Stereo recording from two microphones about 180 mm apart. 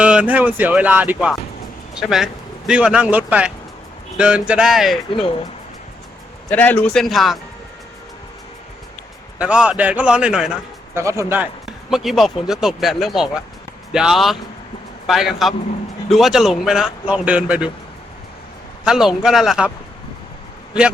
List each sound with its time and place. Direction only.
0.0 s speech: 5° right (ahead or behind)
6.5 s speech: 10° left (ahead or behind)
9.4 s speech: 5° right (ahead or behind)
10.9 s speech: 15° right (ahead or behind)
11.6 s speech: centre (ahead or behind)
18.9 s speech: 5° right (ahead or behind)